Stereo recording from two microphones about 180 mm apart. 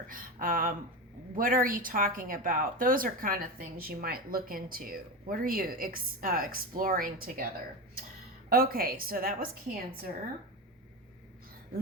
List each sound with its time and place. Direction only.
0.1 s a woman's voice: 50° right (ahead or behind)